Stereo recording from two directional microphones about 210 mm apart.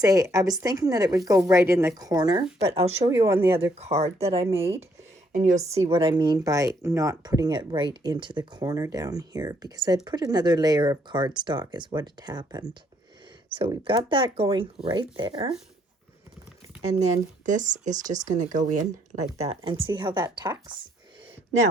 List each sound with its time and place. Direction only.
0.0 s speech: 15° right (ahead or behind); by 5.6 s 35° right (ahead or behind)
5.9 s speech: 25° right (ahead or behind)
16.8 s speech: 30° right (ahead or behind)